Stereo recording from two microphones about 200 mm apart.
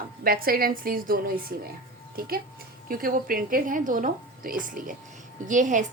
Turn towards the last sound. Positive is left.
turn(degrees=-40)  # may be behind; listen again after turning